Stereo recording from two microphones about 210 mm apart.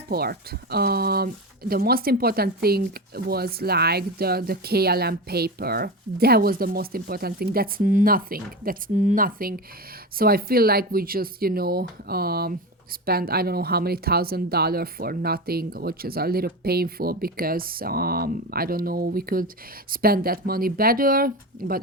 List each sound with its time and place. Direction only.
0.1 s speech: 45° right (ahead or behind)